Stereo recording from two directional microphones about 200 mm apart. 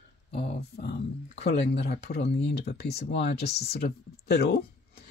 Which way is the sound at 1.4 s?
55° left (ahead or behind).